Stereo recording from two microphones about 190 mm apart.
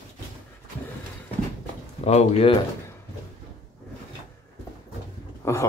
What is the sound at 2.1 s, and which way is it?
Speech, 35° left (ahead or behind).